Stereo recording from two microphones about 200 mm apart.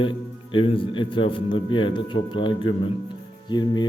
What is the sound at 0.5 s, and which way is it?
A man's voice, 25° left (ahead or behind).